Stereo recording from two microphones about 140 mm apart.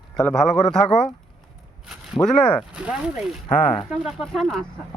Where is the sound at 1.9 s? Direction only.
5° right (ahead or behind).